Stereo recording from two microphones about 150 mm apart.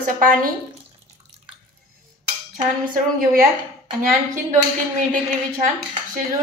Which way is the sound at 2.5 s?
65° right (ahead or behind).